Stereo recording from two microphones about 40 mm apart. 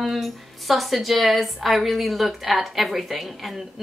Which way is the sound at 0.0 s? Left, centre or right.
Centre.